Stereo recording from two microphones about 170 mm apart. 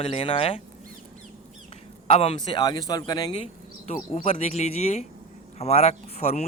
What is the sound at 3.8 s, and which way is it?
Speech, 45° left (ahead or behind).